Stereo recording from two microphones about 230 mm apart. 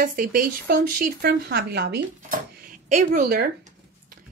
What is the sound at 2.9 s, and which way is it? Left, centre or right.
Speech, right.